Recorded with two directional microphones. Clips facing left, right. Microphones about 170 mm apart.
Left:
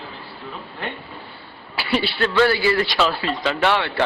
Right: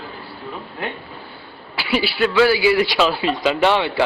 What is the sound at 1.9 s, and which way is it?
Speech, 5° right (ahead or behind).